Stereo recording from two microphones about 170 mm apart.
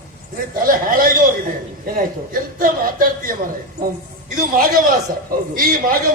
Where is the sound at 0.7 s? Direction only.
55° right (ahead or behind).